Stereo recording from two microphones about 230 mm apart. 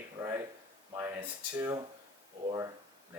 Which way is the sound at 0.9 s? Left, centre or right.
Centre.